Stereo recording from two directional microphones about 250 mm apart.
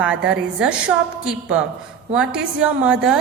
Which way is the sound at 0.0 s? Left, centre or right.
Centre.